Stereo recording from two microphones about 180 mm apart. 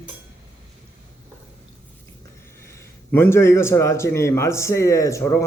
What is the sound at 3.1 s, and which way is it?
A man's voice, 15° left (ahead or behind).